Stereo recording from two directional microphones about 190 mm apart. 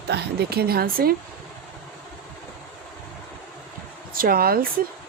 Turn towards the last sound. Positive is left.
turn(degrees=-50)  # may be behind; listen again after turning